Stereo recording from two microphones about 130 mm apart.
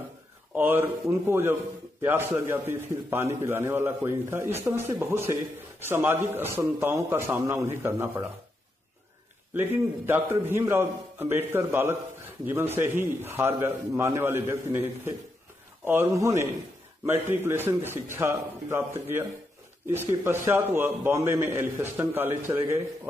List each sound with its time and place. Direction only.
0.6 s a man's voice: 15° right (ahead or behind)
9.5 s a man's voice: 15° right (ahead or behind)